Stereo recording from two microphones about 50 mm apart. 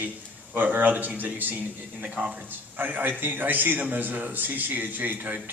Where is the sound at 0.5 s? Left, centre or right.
Right.